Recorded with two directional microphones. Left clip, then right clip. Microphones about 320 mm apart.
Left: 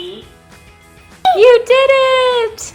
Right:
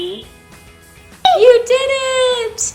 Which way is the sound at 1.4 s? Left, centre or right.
Left.